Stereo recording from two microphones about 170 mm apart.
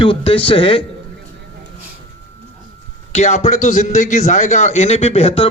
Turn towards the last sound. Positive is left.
turn(degrees=35)  # may be behind; listen again after turning